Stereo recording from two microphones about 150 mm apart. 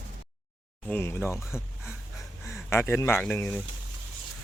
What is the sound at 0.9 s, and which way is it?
Speech, 15° left (ahead or behind).